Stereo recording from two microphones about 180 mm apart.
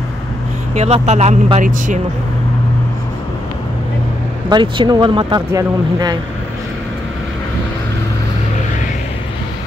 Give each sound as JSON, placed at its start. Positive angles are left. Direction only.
{"t": 0.7, "sound": "speech", "side_deg": -35}
{"t": 4.5, "sound": "speech", "side_deg": -25}